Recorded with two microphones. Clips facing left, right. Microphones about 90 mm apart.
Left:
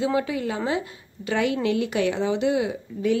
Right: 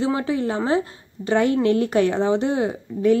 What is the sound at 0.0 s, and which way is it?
A woman's voice, 30° right (ahead or behind).